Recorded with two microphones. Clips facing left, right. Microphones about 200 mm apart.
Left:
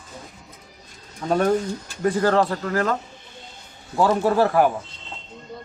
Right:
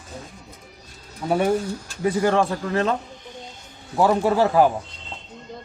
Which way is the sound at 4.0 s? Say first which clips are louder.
Even; 15° right (ahead or behind).